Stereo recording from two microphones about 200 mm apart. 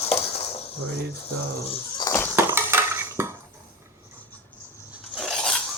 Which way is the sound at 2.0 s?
15° left (ahead or behind).